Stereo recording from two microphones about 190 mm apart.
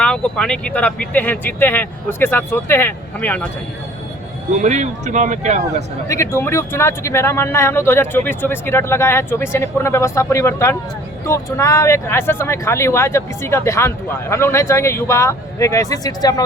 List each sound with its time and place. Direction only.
0.0 s speech: 5° left (ahead or behind)
4.5 s speech: 40° right (ahead or behind)
6.1 s speech: 15° left (ahead or behind)